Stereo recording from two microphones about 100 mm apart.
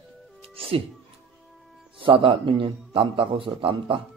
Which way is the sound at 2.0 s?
60° right (ahead or behind).